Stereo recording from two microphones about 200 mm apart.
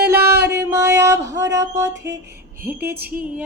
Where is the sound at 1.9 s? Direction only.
60° right (ahead or behind).